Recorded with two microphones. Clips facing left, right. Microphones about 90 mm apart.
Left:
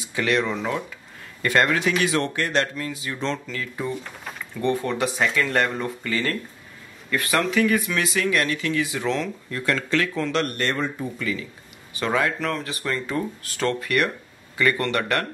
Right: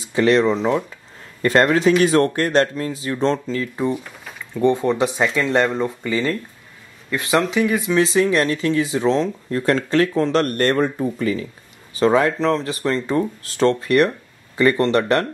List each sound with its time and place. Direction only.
0.1 s speech: 30° right (ahead or behind)
4.0 s a sound: centre (ahead or behind)
4.7 s speech: 20° right (ahead or behind)